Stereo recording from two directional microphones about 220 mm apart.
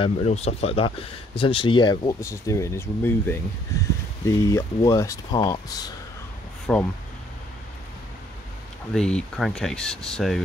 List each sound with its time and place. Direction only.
0.0 s speech: 30° left (ahead or behind)
6.6 s speech: 5° left (ahead or behind)
8.9 s speech: 5° left (ahead or behind)